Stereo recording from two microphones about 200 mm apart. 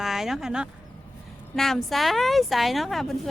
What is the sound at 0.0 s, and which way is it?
A woman's voice, centre (ahead or behind).